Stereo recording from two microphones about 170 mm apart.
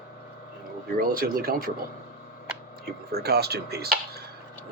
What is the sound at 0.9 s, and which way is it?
Speech, 60° right (ahead or behind).